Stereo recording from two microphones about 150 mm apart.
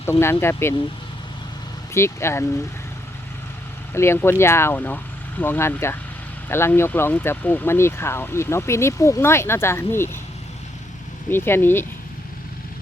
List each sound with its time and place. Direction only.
0.0 s speech: 15° left (ahead or behind)
1.9 s speech: 15° left (ahead or behind)
3.9 s speech: 15° left (ahead or behind)
11.3 s speech: 15° left (ahead or behind)